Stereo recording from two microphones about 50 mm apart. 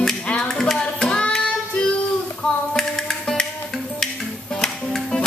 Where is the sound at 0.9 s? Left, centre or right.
Centre.